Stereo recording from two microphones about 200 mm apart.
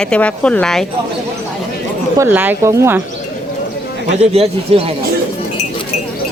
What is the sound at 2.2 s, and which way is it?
Speech, 10° right (ahead or behind).